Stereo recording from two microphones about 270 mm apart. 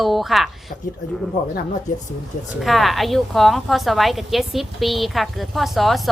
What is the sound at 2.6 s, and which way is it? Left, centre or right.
A woman's voice, centre.